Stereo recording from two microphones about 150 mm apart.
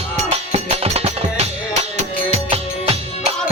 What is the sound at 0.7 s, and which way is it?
Music, 45° right (ahead or behind).